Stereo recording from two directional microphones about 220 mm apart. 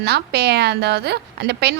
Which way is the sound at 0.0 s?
50° right (ahead or behind).